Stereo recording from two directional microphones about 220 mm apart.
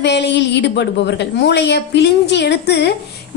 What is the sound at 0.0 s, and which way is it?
A woman's voice, 50° left (ahead or behind).